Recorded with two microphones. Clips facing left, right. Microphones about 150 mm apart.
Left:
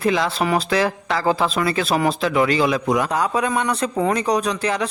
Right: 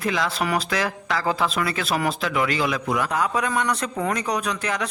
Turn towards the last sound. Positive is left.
turn(degrees=30)  # may be behind; listen again after turning